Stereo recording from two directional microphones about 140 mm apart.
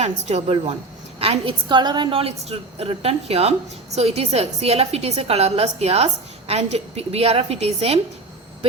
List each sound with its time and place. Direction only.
0.0 s a woman's voice: 50° right (ahead or behind)